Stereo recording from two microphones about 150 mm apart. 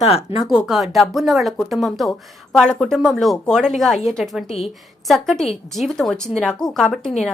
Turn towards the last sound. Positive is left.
turn(degrees=0)  # may be behind; listen again after turning